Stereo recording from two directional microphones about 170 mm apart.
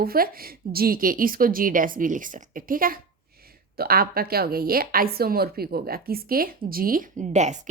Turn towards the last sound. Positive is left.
turn(degrees=-45)  # may be behind; listen again after turning